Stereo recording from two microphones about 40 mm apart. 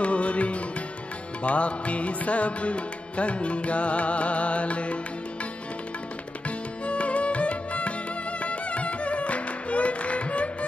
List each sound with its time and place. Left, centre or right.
0.0 s music: left